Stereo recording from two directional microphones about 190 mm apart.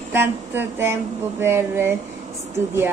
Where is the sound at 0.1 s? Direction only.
10° right (ahead or behind).